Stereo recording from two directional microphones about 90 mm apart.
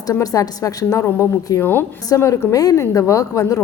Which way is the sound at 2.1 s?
40° left (ahead or behind).